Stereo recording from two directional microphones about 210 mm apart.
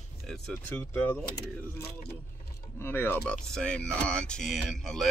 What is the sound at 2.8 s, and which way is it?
Speech, 10° left (ahead or behind).